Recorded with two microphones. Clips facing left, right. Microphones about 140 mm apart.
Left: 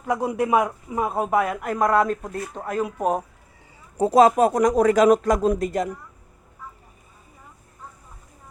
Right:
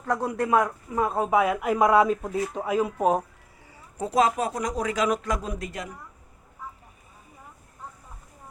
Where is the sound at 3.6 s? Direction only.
25° left (ahead or behind).